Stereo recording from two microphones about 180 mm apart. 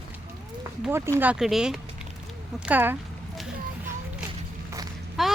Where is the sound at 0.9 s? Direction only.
10° right (ahead or behind).